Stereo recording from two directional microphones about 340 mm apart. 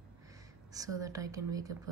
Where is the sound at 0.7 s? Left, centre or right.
Centre.